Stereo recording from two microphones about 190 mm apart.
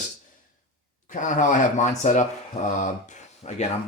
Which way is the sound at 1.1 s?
40° left (ahead or behind).